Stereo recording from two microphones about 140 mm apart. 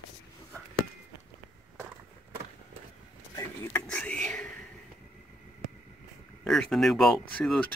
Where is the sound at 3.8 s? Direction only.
5° left (ahead or behind).